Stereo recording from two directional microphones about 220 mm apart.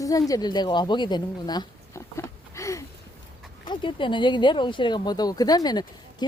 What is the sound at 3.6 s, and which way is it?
Speech, 20° left (ahead or behind).